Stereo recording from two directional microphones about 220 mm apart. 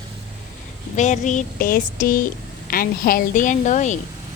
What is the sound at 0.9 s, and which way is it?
Speech, 35° left (ahead or behind).